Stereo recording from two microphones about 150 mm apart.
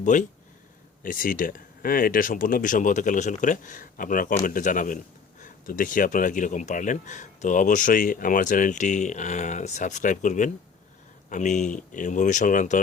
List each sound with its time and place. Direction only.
0.0 s speech: 55° left (ahead or behind)